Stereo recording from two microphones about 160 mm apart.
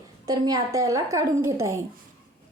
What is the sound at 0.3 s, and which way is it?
A woman's voice, 25° right (ahead or behind).